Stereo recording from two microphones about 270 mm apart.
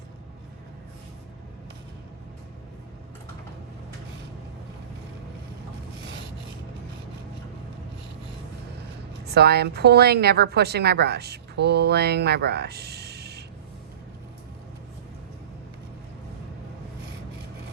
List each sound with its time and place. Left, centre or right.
9.2 s a woman's voice: right